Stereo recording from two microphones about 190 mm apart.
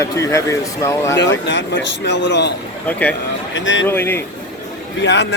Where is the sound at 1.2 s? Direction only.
70° left (ahead or behind).